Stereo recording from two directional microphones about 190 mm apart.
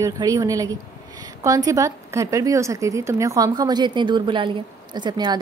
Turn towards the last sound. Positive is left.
turn(degrees=-25)  # may be behind; listen again after turning